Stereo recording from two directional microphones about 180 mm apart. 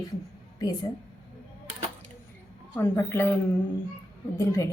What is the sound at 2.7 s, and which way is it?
Speech, 15° left (ahead or behind).